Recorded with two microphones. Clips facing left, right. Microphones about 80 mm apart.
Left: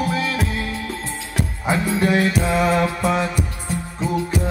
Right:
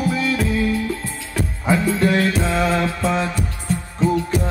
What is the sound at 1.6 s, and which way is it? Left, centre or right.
Music, centre.